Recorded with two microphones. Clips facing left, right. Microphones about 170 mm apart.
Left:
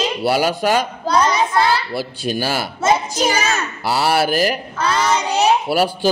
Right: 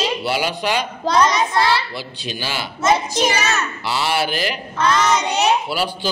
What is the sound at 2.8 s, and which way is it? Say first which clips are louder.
A child's voice: even; 30° left (ahead or behind).